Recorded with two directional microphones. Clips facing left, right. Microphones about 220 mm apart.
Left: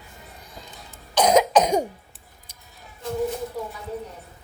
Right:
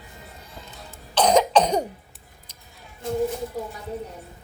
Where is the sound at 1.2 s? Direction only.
10° left (ahead or behind).